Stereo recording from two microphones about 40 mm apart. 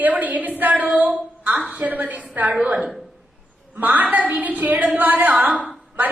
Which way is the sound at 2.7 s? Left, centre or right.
Right.